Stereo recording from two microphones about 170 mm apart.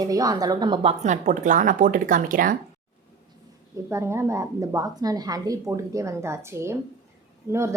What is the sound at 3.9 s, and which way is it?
A woman's voice, 15° right (ahead or behind).